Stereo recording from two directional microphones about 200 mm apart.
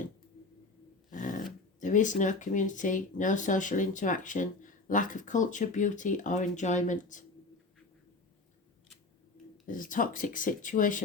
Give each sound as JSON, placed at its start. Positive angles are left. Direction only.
{"t": 1.1, "sound": "dog", "side_deg": 40}
{"t": 1.8, "sound": "speech", "side_deg": 40}
{"t": 9.6, "sound": "speech", "side_deg": 40}